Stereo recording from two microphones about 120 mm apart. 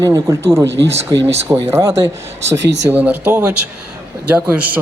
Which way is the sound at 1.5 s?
25° right (ahead or behind).